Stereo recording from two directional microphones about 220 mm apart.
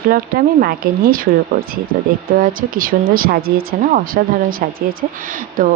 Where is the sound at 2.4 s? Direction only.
40° right (ahead or behind).